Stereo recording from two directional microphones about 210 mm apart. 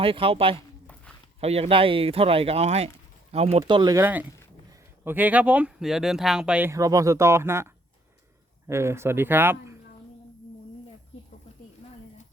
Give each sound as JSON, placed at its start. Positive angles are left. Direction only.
{"t": 0.0, "sound": "speech", "side_deg": -25}